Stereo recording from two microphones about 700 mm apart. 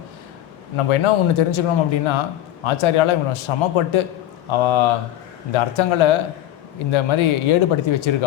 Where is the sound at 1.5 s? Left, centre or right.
Left.